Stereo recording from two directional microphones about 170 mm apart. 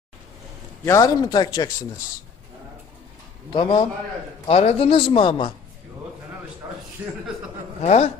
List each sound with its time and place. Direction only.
0.8 s speech: 20° left (ahead or behind)
3.5 s a man's voice: 30° left (ahead or behind)
7.0 s speech: 10° right (ahead or behind)
7.8 s a man's voice: 40° left (ahead or behind)